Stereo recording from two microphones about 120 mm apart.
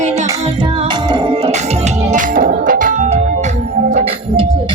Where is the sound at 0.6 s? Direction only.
45° right (ahead or behind); by 4.1 s 80° right.